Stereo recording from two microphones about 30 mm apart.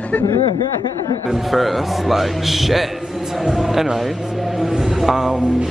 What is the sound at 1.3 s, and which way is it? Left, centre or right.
A man's voice, centre.